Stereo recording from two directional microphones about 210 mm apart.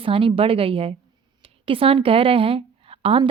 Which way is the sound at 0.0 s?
25° right (ahead or behind).